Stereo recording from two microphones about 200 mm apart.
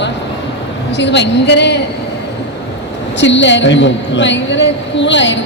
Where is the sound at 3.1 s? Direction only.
65° left (ahead or behind).